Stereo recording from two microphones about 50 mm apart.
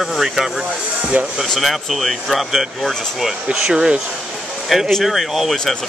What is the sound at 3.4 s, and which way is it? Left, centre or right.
Speech, centre.